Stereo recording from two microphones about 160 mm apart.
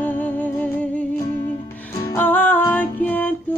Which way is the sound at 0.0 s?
10° left (ahead or behind).